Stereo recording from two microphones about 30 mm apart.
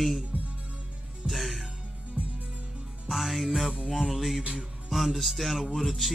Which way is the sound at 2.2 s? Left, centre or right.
Right.